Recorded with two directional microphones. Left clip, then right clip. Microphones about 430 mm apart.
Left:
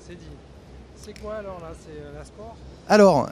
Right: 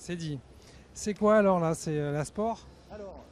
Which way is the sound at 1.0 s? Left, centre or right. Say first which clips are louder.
Right 11 dB; right.